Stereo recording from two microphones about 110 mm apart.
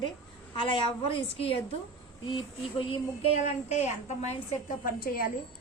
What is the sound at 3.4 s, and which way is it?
A woman's voice, 90° left.